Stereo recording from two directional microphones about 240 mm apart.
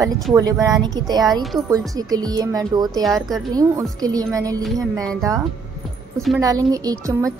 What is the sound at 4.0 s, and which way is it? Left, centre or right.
Speech, centre.